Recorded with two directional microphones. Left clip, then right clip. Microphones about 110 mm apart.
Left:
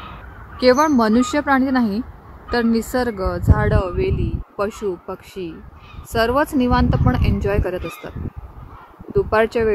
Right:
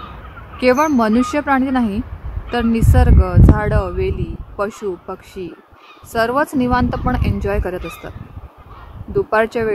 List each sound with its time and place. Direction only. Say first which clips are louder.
0.6 s speech: even; 35° left (ahead or behind)
9.1 s speech: right 1 dB; 40° left (ahead or behind)